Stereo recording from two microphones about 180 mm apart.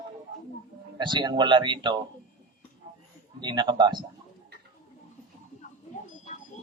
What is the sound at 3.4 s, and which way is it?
Speech, 25° right (ahead or behind).